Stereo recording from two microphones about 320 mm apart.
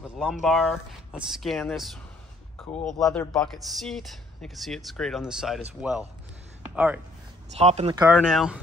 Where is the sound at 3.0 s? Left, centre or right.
Centre.